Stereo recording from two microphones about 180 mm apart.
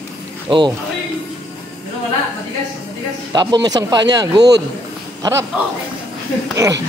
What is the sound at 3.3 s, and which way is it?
A man's voice, 25° right (ahead or behind).